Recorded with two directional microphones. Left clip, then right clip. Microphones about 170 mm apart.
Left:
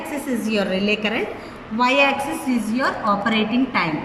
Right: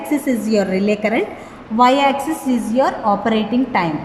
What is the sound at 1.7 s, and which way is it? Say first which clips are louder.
A woman's voice: right 4 dB; 40° right (ahead or behind).